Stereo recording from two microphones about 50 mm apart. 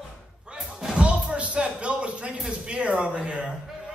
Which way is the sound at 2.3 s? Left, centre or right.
Centre.